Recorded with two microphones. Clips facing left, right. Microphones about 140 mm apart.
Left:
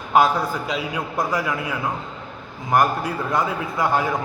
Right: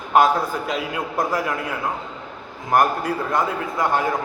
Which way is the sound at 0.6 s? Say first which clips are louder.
Right 1 dB; 50° right (ahead or behind).